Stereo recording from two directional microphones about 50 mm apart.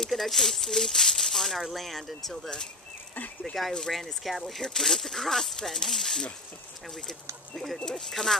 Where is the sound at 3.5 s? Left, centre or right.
Left.